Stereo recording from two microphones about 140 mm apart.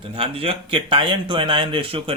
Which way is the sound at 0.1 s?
40° right (ahead or behind).